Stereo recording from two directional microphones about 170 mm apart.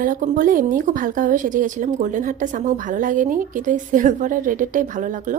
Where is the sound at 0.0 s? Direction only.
55° right (ahead or behind).